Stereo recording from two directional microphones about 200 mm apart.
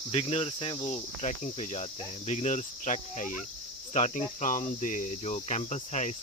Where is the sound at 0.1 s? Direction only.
30° left (ahead or behind).